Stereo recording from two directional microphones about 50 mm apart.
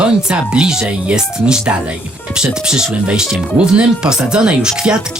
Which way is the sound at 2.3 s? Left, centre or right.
Centre.